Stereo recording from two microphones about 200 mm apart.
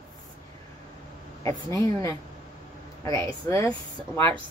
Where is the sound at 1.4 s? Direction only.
15° left (ahead or behind).